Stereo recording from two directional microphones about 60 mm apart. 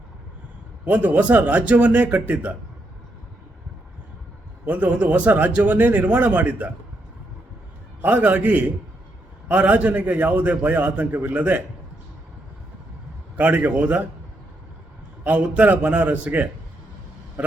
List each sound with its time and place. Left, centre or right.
0.9 s a man's voice: right
4.6 s a man's voice: right
8.0 s a man's voice: right
13.3 s a man's voice: right
15.2 s a man's voice: right